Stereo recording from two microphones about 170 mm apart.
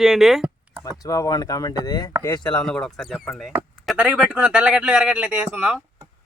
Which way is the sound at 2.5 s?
5° left (ahead or behind).